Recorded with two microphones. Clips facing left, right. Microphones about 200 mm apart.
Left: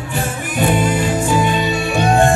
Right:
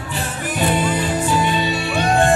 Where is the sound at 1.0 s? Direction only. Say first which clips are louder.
Left 3 dB; 45° left (ahead or behind).